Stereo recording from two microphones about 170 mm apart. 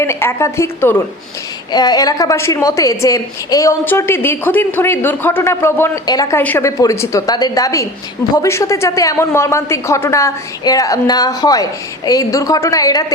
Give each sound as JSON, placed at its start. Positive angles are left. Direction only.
{"t": 0.0, "sound": "a woman's voice", "side_deg": 15}